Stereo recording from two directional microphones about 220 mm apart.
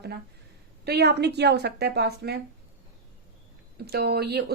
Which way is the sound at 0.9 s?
50° right (ahead or behind).